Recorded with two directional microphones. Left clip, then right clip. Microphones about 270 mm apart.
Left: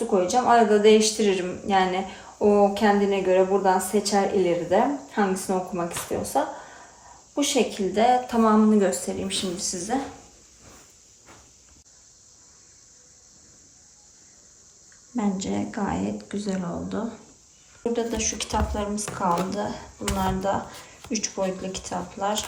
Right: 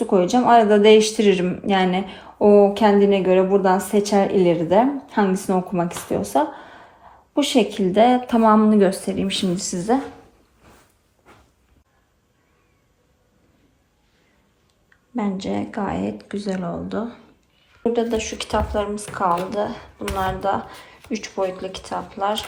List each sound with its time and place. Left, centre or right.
0.1 s speech: right
7.5 s speech: right
15.1 s speech: centre